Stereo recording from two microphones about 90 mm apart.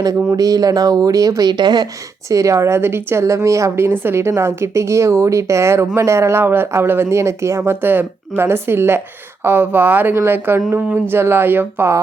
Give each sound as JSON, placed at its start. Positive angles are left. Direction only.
{"t": 0.0, "sound": "speech", "side_deg": -40}
{"t": 2.3, "sound": "a woman's voice", "side_deg": -35}